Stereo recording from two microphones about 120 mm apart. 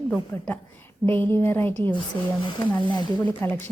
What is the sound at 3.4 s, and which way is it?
Speech, 15° left (ahead or behind).